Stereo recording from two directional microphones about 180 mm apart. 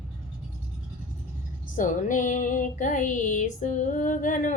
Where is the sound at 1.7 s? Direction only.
45° left (ahead or behind).